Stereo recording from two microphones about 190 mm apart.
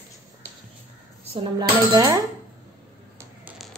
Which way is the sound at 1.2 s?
30° right (ahead or behind).